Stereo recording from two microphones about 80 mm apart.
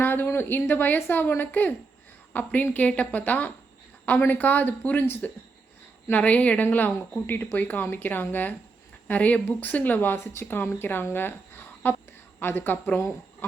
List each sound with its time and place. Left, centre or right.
0.0 s speech: left